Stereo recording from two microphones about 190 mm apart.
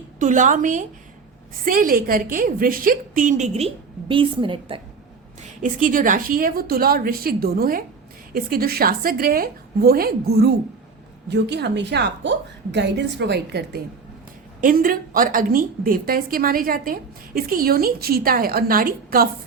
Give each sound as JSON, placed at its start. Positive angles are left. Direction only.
{"t": 0.2, "sound": "a woman's voice", "side_deg": -40}
{"t": 5.4, "sound": "a woman's voice", "side_deg": -45}
{"t": 14.6, "sound": "a woman's voice", "side_deg": -45}